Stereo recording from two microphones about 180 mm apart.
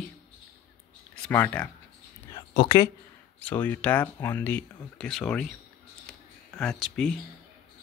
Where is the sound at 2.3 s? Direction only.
25° left (ahead or behind).